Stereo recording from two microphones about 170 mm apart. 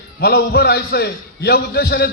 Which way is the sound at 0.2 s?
70° left (ahead or behind).